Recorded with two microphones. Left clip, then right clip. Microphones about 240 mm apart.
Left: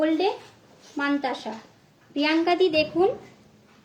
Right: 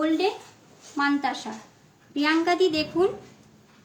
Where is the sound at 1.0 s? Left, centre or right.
Right.